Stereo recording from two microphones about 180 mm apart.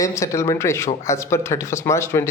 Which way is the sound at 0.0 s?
15° left (ahead or behind).